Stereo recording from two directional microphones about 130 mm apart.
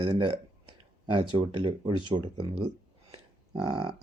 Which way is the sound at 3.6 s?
40° right (ahead or behind).